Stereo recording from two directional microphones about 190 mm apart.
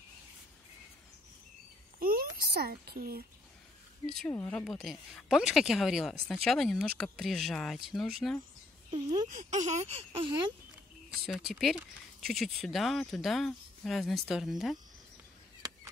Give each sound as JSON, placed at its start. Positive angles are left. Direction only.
{"t": 2.0, "sound": "a sound", "side_deg": -50}
{"t": 2.3, "sound": "speech", "side_deg": -55}
{"t": 4.0, "sound": "speech", "side_deg": 0}
{"t": 9.3, "sound": "speech", "side_deg": -40}
{"t": 11.1, "sound": "speech", "side_deg": 0}